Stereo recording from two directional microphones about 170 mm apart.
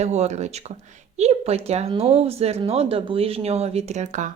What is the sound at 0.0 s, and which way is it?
A woman's voice, 40° right (ahead or behind).